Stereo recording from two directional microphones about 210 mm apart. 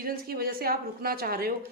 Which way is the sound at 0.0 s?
45° right (ahead or behind).